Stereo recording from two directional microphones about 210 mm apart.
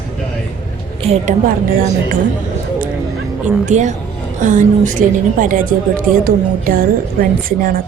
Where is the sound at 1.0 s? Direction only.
35° right (ahead or behind).